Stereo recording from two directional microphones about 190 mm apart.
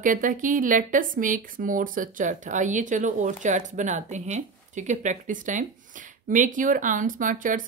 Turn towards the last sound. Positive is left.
turn(degrees=-45)  # may be behind; listen again after turning